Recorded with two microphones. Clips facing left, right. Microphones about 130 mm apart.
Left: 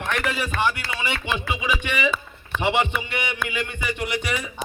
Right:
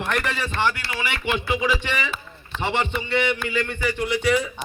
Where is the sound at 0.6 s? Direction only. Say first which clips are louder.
Right 1 dB; 20° left (ahead or behind).